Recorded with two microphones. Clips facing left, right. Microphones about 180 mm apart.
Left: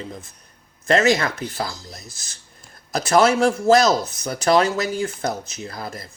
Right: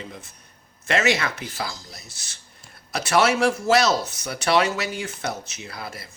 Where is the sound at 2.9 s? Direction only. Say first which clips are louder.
Left 4 dB; 35° left (ahead or behind).